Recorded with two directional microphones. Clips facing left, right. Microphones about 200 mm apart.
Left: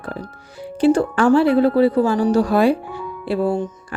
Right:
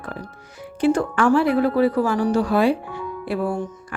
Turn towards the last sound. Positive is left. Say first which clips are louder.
# left 4 dB
turn(degrees=25)  # may be behind; listen again after turning